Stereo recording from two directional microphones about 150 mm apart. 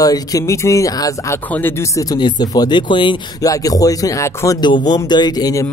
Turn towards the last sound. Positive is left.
turn(degrees=25)  # may be behind; listen again after turning